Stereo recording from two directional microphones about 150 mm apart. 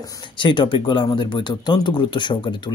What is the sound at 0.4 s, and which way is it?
Speech, 35° left (ahead or behind).